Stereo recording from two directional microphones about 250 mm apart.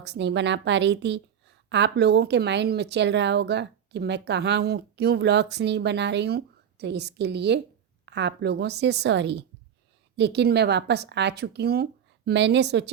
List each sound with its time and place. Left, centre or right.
0.0 s a woman's voice: right